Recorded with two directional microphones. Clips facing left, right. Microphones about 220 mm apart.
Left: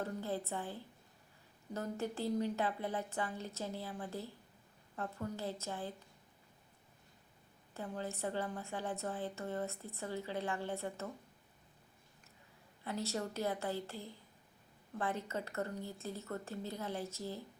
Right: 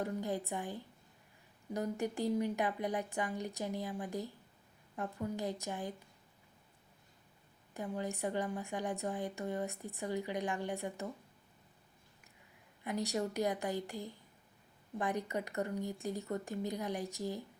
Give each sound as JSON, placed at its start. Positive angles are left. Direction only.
{"t": 0.0, "sound": "a woman's voice", "side_deg": -15}
{"t": 7.7, "sound": "a woman's voice", "side_deg": -15}
{"t": 12.8, "sound": "a woman's voice", "side_deg": -15}